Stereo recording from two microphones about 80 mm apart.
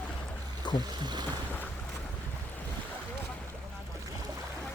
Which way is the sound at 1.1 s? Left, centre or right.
Right.